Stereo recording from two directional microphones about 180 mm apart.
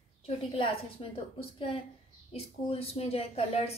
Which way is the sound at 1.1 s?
30° left (ahead or behind).